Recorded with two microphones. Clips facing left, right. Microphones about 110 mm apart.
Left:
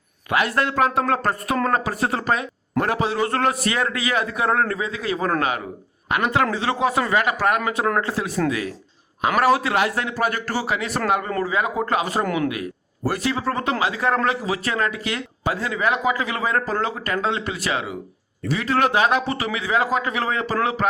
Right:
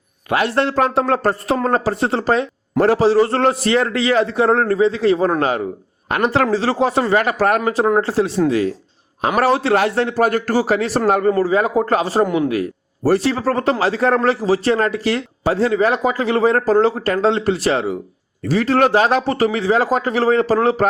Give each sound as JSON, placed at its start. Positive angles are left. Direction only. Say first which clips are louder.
{"t": 0.3, "sound": "a man's voice", "louder": "right 4 dB", "side_deg": -30}
{"t": 12.2, "sound": "speech", "louder": "right 6 dB", "side_deg": -20}
{"t": 13.1, "sound": "a man's voice", "louder": "right 7 dB", "side_deg": -30}